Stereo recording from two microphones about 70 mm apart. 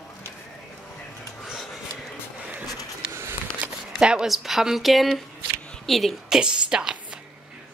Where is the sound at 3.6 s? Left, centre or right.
Centre.